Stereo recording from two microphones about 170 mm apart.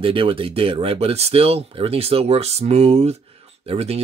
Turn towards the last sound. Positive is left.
turn(degrees=-35)  # may be behind; listen again after turning